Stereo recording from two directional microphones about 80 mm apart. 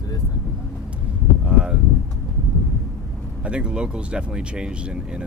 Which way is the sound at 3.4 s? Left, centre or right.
Centre.